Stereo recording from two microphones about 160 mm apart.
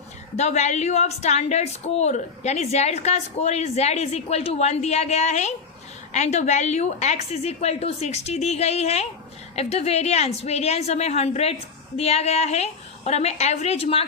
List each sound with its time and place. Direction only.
0.3 s a woman's voice: 45° left (ahead or behind)